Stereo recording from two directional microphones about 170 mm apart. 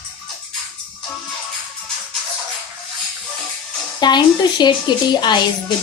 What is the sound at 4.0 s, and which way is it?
A woman's voice, 25° left (ahead or behind).